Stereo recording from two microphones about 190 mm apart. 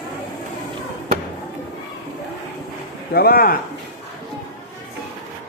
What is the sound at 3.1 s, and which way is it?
Speech, 50° left (ahead or behind).